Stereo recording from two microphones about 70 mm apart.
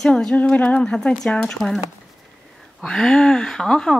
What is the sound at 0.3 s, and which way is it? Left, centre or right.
Speech, left.